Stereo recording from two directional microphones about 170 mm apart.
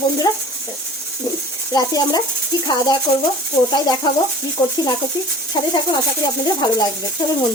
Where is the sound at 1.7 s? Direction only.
25° left (ahead or behind).